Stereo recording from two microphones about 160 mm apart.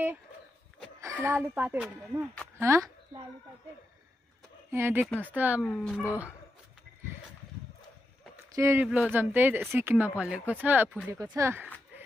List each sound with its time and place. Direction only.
1.2 s speech: 15° right (ahead or behind)
4.6 s speech: 15° right (ahead or behind)
5.0 s speech: centre (ahead or behind)
5.3 s speech: 10° right (ahead or behind)
5.6 s speech: centre (ahead or behind)
8.5 s speech: 15° right (ahead or behind)
8.8 s speech: centre (ahead or behind)
9.1 s speech: 10° right (ahead or behind)